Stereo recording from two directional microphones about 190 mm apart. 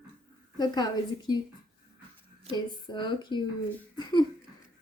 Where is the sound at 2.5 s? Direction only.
25° left (ahead or behind).